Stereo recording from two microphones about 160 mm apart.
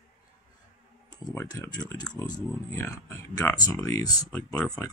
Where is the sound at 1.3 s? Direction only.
15° left (ahead or behind).